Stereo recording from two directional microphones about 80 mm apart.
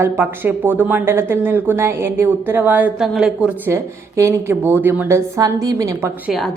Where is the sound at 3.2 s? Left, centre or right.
Centre.